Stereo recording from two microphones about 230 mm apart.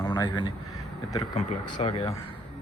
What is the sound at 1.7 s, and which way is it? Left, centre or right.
Speech, left.